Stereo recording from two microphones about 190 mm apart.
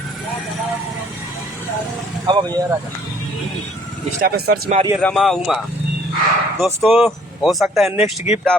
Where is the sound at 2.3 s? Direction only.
25° right (ahead or behind).